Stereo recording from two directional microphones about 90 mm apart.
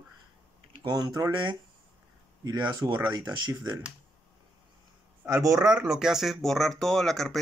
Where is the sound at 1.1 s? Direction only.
50° right (ahead or behind).